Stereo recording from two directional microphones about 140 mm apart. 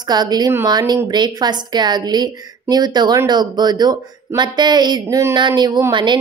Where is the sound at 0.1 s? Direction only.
30° right (ahead or behind).